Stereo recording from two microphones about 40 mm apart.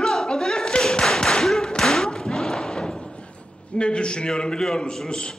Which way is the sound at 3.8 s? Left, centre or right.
Left.